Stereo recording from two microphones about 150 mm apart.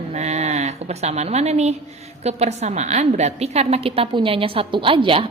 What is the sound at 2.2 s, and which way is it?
A woman's voice, 45° right (ahead or behind).